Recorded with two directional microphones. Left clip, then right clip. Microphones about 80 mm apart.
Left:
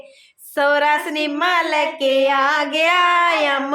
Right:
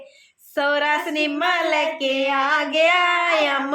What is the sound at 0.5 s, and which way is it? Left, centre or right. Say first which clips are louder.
Child singing: left 4 dB; left.